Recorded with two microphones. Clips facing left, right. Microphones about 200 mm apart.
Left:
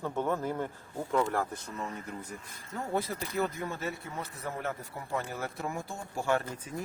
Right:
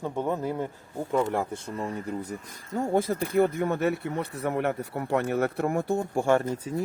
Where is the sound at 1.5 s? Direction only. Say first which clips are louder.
Right 6 dB; 30° right (ahead or behind).